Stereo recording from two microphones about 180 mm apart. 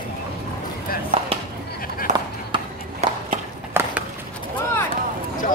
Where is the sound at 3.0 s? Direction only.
35° right (ahead or behind).